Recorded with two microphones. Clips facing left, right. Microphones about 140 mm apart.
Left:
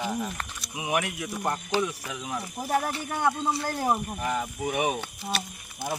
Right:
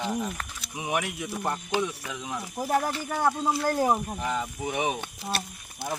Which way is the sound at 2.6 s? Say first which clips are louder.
Right 2 dB; centre (ahead or behind).